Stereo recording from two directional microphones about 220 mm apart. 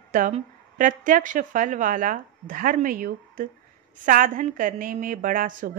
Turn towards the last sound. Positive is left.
turn(degrees=-40)  # may be behind; listen again after turning